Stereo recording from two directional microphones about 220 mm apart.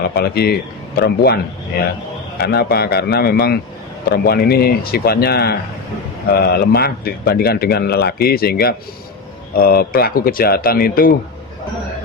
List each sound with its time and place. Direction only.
0.1 s a man's voice: 45° left (ahead or behind)
2.4 s a man's voice: 45° left (ahead or behind)